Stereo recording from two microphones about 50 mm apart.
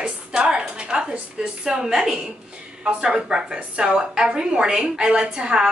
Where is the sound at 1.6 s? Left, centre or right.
Centre.